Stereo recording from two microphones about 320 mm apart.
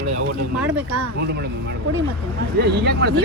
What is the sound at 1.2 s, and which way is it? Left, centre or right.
Speech, right.